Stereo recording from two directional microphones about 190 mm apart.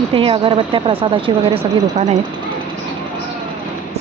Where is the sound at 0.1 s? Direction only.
30° right (ahead or behind).